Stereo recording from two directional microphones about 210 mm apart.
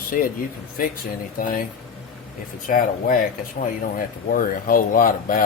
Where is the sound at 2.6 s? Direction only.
40° left (ahead or behind).